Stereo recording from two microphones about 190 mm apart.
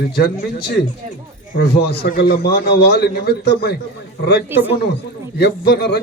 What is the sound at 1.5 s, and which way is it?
A man's voice, 50° left (ahead or behind).